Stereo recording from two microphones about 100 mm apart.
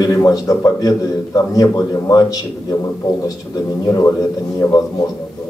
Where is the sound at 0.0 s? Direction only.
40° left (ahead or behind).